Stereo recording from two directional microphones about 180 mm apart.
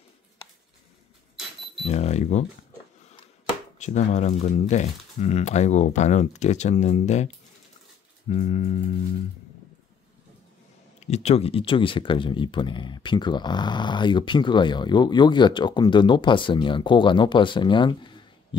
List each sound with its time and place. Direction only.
1.9 s speech: 35° left (ahead or behind)
3.7 s speech: 40° left (ahead or behind)
8.3 s speech: 35° left (ahead or behind)
11.0 s speech: 40° left (ahead or behind)